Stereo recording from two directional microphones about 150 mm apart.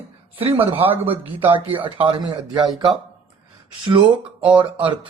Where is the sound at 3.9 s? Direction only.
35° right (ahead or behind).